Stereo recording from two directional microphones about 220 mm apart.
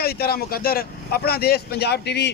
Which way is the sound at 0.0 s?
45° left (ahead or behind).